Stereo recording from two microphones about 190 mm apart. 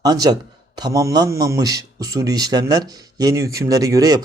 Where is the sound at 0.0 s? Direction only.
20° right (ahead or behind).